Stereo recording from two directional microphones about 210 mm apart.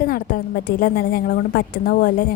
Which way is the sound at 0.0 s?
45° left (ahead or behind).